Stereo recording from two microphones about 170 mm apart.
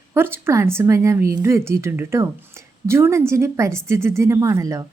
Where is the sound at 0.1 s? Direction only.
15° right (ahead or behind).